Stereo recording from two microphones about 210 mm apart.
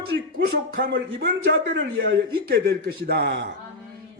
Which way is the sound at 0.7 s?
45° right (ahead or behind).